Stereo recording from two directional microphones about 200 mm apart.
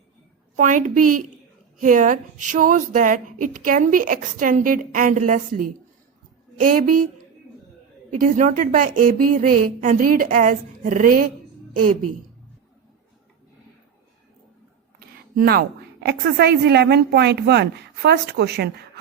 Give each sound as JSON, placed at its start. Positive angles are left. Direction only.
{"t": 0.5, "sound": "speech", "side_deg": -40}
{"t": 6.7, "sound": "a woman's voice", "side_deg": -45}
{"t": 8.2, "sound": "a woman's voice", "side_deg": -40}
{"t": 14.9, "sound": "a woman's voice", "side_deg": -50}